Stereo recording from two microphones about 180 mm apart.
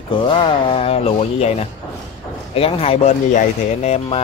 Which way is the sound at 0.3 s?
30° left (ahead or behind).